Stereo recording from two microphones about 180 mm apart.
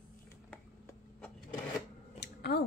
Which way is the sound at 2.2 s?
65° left (ahead or behind).